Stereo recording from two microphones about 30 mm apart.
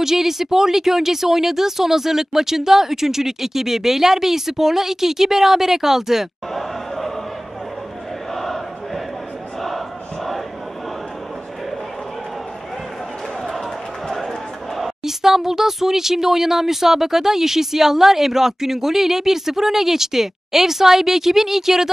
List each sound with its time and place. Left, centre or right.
0.0 s speech: centre
8.4 s a sound: centre
9.6 s crowd: centre
15.0 s speech: centre